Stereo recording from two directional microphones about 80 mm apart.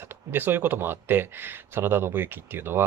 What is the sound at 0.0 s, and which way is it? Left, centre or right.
Speech, right.